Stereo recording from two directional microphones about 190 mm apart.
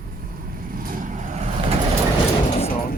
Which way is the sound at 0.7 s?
45° right (ahead or behind).